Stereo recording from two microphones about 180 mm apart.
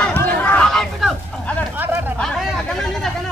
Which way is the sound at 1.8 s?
10° right (ahead or behind).